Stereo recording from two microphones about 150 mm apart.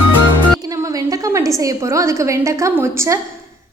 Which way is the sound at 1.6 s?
20° right (ahead or behind).